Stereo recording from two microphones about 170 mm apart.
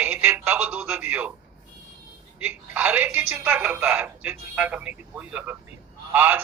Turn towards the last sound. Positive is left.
turn(degrees=-10)  # may be behind; listen again after turning